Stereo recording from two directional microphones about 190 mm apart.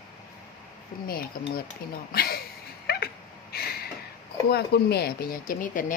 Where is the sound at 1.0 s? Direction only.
50° left (ahead or behind).